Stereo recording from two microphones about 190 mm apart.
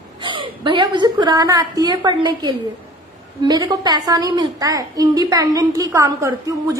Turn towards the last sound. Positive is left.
turn(degrees=-15)  # may be behind; listen again after turning